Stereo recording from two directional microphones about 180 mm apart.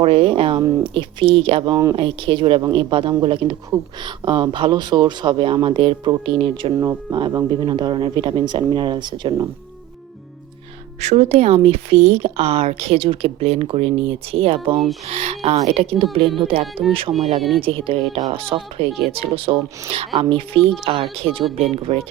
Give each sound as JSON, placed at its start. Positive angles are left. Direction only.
{"t": 0.0, "sound": "speech", "side_deg": -30}
{"t": 11.0, "sound": "speech", "side_deg": -35}
{"t": 18.9, "sound": "speech", "side_deg": 0}
{"t": 19.1, "sound": "speech", "side_deg": -30}